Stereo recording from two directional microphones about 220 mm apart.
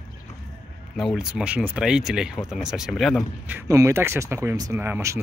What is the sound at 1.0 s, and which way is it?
Speech, centre (ahead or behind).